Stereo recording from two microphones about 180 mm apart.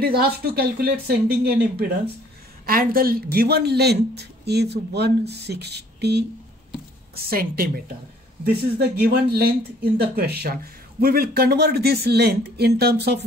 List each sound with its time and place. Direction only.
0.0 s speech: 60° right (ahead or behind)
7.2 s speech: 55° right (ahead or behind)